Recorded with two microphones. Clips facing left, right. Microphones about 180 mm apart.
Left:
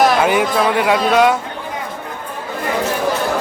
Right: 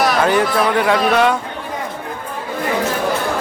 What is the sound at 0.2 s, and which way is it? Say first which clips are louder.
Speech: even; 10° left (ahead or behind).